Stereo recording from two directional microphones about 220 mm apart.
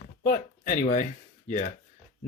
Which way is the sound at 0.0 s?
35° left (ahead or behind).